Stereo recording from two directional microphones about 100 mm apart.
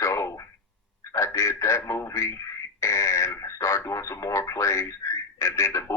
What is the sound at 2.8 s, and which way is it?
Radio, 30° left (ahead or behind).